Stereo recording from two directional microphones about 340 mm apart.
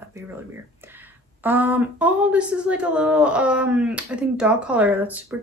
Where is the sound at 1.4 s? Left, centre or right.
Centre.